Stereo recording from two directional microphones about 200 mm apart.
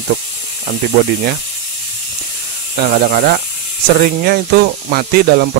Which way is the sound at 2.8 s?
45° right (ahead or behind).